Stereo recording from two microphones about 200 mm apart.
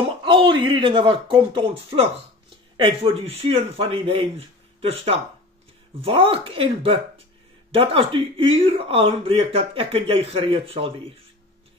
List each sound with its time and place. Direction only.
0.2 s speech: 25° right (ahead or behind)
5.9 s speech: 25° right (ahead or behind)